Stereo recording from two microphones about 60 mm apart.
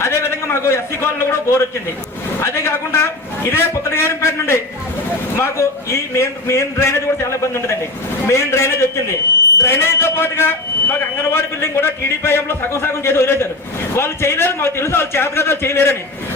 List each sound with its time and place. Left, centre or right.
0.0 s a man's voice: left